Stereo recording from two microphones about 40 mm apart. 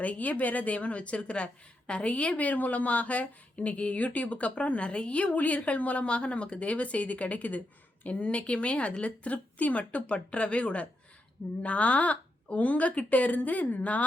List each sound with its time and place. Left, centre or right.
0.0 s a woman's voice: left